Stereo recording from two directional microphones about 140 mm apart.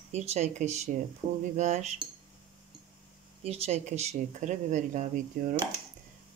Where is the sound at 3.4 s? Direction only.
45° right (ahead or behind); by 5.5 s 65° right (ahead or behind).